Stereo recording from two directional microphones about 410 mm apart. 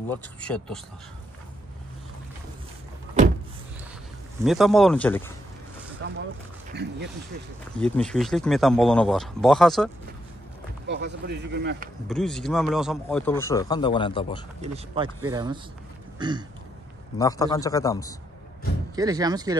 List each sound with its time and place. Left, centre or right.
0.1 s speech: centre
4.5 s speech: centre
6.7 s speech: right
7.7 s speech: centre
10.9 s speech: right
12.1 s speech: centre
14.6 s speech: centre
17.2 s a man's voice: centre
18.9 s speech: centre